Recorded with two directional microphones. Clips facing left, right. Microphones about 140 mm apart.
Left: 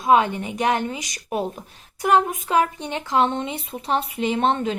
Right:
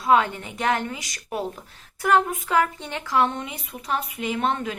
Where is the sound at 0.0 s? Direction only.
20° left (ahead or behind).